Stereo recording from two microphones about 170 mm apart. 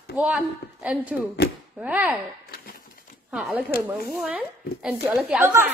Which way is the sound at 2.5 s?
55° left (ahead or behind).